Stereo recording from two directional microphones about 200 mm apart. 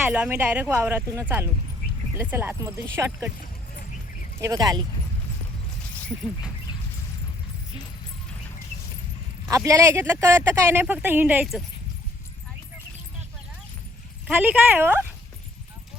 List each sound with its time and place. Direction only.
0.0 s speech: 10° right (ahead or behind)
4.4 s speech: 15° right (ahead or behind)
9.5 s speech: 15° right (ahead or behind)
14.3 s speech: 10° right (ahead or behind)